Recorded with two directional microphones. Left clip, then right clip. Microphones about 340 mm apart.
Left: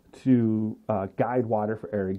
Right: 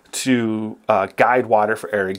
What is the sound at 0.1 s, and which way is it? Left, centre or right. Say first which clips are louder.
Speech: right 5 dB; centre.